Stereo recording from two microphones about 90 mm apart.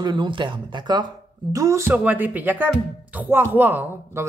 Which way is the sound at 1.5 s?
35° right (ahead or behind).